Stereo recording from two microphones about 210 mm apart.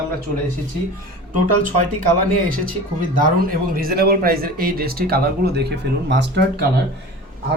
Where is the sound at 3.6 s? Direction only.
45° right (ahead or behind).